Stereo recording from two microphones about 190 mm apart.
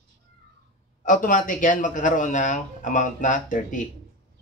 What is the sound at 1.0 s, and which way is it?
A man's voice, 45° left (ahead or behind).